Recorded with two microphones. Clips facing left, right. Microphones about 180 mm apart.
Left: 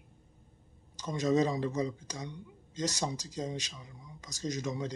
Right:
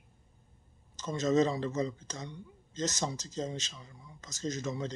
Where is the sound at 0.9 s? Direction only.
15° left (ahead or behind).